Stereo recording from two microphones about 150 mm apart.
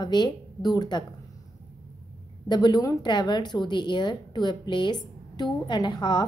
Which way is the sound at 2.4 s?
30° left (ahead or behind).